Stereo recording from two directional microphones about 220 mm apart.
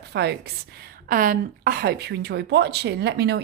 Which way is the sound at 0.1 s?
50° right (ahead or behind).